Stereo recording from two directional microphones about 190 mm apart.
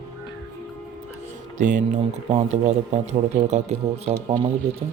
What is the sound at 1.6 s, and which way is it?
Speech, 40° right (ahead or behind).